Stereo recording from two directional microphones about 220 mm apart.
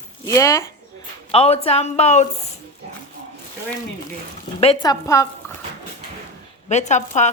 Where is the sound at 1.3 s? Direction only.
25° left (ahead or behind).